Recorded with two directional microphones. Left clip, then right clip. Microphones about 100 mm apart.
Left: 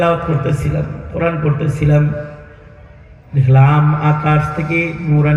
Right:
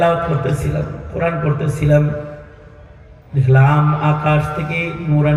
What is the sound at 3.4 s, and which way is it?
Mantra, 30° right (ahead or behind).